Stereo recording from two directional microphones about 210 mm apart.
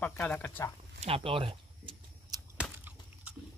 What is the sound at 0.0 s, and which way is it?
Speech, 5° left (ahead or behind).